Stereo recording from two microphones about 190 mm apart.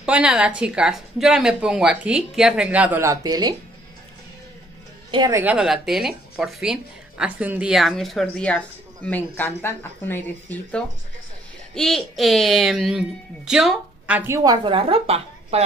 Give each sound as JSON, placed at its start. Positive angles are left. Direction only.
{"t": 0.0, "sound": "speech", "side_deg": -5}
{"t": 5.1, "sound": "a woman's voice", "side_deg": -20}
{"t": 5.4, "sound": "speech", "side_deg": -5}